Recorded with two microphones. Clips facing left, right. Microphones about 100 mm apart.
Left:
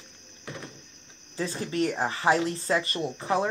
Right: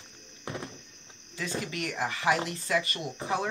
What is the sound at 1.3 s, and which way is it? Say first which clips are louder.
Speech: left 5 dB; 35° left (ahead or behind).